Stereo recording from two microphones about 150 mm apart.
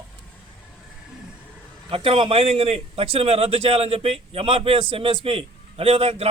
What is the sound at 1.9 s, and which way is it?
A man's voice, 40° right (ahead or behind).